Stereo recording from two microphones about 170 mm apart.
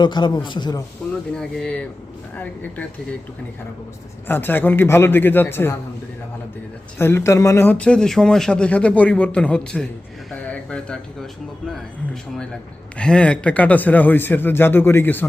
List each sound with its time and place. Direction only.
0.0 s a man's voice: 25° left (ahead or behind)
1.3 s speech: 5° left (ahead or behind)
4.3 s speech: 10° left (ahead or behind)
7.0 s speech: 15° left (ahead or behind)
13.0 s speech: 5° left (ahead or behind)